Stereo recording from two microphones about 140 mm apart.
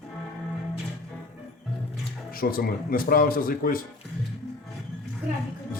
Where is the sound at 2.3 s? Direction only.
90° left.